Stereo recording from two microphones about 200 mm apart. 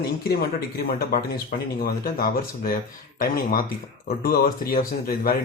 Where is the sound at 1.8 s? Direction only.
45° left (ahead or behind).